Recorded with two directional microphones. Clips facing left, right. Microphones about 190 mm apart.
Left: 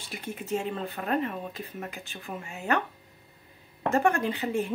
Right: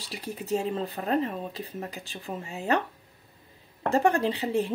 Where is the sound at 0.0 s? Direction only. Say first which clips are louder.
Right 1 dB; 35° right (ahead or behind).